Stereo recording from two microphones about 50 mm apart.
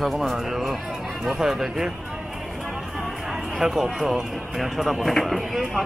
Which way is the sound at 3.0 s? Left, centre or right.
Centre.